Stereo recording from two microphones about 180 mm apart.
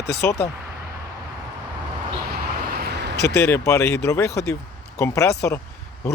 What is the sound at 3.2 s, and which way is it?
Speech, 65° left (ahead or behind).